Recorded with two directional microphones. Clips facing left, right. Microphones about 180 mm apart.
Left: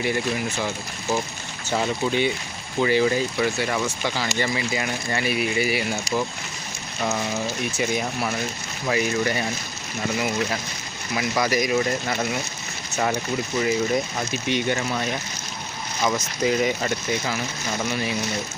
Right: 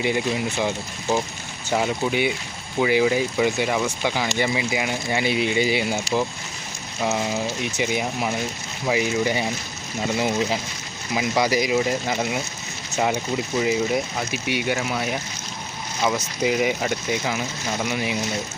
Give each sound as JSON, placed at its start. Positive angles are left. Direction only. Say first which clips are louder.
{"t": 0.0, "sound": "speech", "louder": "right 2 dB", "side_deg": -20}
{"t": 1.7, "sound": "speech", "louder": "right 1 dB", "side_deg": -10}
{"t": 7.0, "sound": "speech", "louder": "right 2 dB", "side_deg": -15}
{"t": 10.2, "sound": "speech", "louder": "right 3 dB", "side_deg": -25}
{"t": 13.6, "sound": "speech", "louder": "even", "side_deg": -10}